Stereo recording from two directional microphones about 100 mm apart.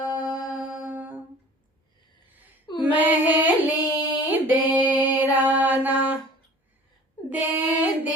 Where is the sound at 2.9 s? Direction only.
15° right (ahead or behind).